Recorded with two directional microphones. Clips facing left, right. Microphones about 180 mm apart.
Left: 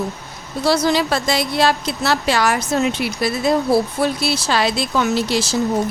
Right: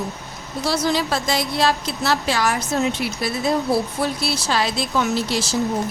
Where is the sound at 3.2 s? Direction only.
80° left.